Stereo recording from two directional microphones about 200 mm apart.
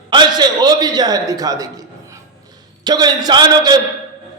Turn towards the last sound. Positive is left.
turn(degrees=-20)  # may be behind; listen again after turning